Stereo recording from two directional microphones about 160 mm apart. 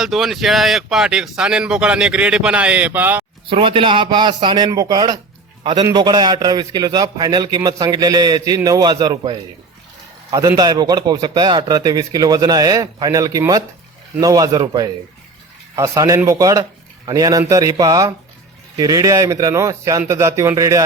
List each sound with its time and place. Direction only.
0.0 s speech: centre (ahead or behind)
3.4 s a man's voice: 35° right (ahead or behind)